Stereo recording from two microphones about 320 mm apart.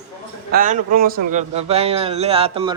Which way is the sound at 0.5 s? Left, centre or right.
Right.